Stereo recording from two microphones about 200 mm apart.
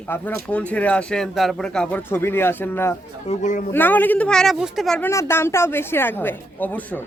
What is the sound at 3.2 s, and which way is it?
Speech, 35° left (ahead or behind).